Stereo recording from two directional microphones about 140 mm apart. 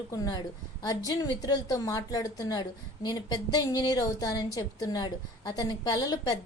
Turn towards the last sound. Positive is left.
turn(degrees=30)  # may be behind; listen again after turning